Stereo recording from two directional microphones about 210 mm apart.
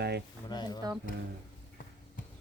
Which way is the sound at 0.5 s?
20° left (ahead or behind).